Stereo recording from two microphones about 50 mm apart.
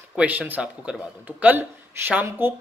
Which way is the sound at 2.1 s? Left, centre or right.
Right.